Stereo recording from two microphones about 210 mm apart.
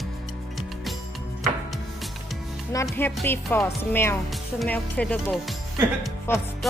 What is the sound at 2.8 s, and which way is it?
Speech, 5° left (ahead or behind).